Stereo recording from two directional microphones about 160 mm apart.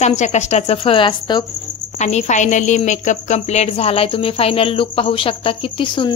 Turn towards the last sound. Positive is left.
turn(degrees=30)  # may be behind; listen again after turning